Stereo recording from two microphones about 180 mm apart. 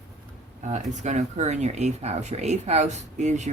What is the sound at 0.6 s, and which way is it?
Speech, 40° right (ahead or behind).